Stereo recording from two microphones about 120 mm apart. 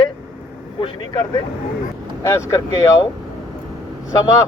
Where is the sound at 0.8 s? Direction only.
40° left (ahead or behind).